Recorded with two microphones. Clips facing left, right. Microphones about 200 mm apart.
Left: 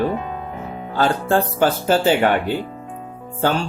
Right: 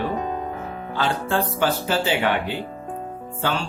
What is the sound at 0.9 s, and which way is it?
Speech, 45° left (ahead or behind).